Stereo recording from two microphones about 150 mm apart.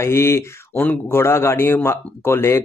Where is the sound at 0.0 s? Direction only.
15° left (ahead or behind).